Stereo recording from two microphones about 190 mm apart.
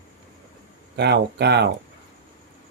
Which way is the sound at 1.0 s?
60° right (ahead or behind).